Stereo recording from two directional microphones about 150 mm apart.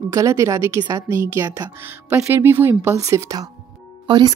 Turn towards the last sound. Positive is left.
turn(degrees=-30)  # may be behind; listen again after turning